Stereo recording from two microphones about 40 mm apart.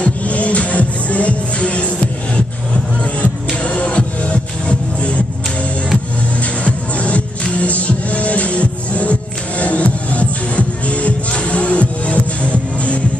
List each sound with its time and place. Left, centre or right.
0.0 s music: left
3.2 s music: left
6.6 s music: left